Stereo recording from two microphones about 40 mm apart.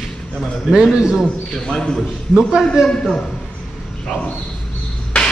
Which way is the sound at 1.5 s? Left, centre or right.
Left.